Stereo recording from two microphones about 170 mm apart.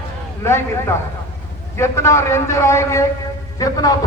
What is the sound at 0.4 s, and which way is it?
A man's voice, 15° left (ahead or behind).